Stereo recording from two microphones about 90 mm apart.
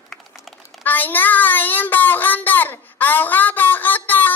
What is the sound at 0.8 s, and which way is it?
Speech, 20° left (ahead or behind).